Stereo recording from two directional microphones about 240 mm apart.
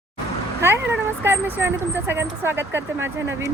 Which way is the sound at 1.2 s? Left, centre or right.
Centre.